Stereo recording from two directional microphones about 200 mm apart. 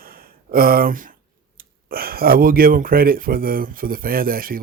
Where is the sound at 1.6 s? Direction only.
50° right (ahead or behind).